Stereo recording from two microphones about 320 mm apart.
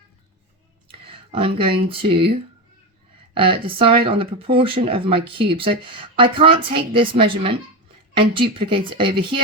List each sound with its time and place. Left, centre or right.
0.9 s speech: centre
3.3 s speech: centre